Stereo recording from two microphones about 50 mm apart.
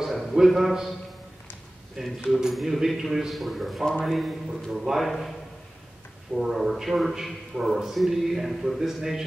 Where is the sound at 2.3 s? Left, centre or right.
Centre.